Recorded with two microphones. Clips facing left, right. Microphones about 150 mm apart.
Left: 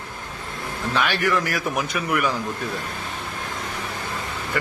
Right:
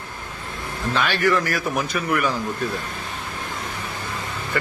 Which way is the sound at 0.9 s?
15° left (ahead or behind).